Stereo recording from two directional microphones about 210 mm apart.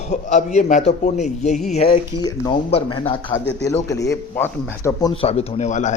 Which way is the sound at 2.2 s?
25° left (ahead or behind).